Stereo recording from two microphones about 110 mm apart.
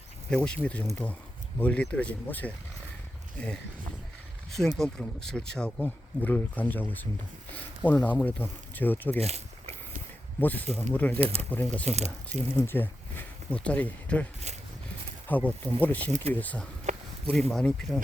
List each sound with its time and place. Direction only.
0.3 s speech: 10° left (ahead or behind)
4.5 s speech: 5° left (ahead or behind)
9.2 s a sound: 70° right (ahead or behind)
10.4 s speech: 15° left (ahead or behind)
11.2 s speech: 65° right (ahead or behind)
11.5 s speech: 15° left (ahead or behind)
11.9 s speech: 90° right
12.3 s speech: 20° left (ahead or behind)
15.3 s speech: 15° left (ahead or behind)
16.9 s a sound: 90° right
17.5 s speech: 10° left (ahead or behind)